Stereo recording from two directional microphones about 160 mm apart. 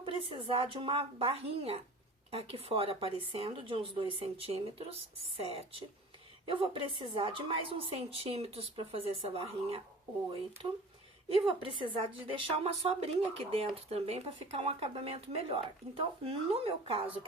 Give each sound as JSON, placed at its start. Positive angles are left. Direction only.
{"t": 0.0, "sound": "speech", "side_deg": -35}
{"t": 11.3, "sound": "speech", "side_deg": -35}